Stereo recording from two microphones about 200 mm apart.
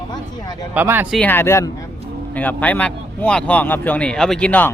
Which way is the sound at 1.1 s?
10° left (ahead or behind).